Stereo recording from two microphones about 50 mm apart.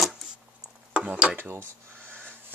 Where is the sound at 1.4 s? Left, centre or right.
Right.